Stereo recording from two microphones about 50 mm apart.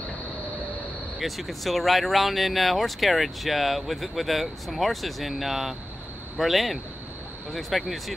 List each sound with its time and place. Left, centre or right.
1.2 s speech: centre